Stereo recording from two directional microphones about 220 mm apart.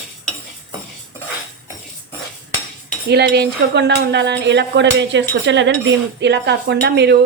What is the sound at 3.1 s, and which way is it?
Speech, 50° right (ahead or behind).